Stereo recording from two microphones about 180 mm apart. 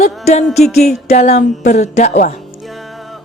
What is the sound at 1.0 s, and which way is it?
Speech, 40° left (ahead or behind).